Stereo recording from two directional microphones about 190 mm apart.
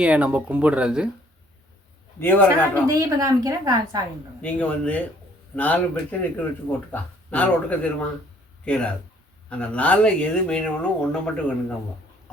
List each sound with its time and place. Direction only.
0.0 s speech: 5° right (ahead or behind)
2.1 s speech: 10° left (ahead or behind)
2.8 s speech: 15° right (ahead or behind)
4.4 s speech: 5° left (ahead or behind)